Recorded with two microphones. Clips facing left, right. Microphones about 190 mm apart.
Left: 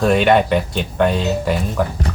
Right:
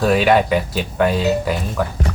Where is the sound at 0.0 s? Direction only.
Centre (ahead or behind).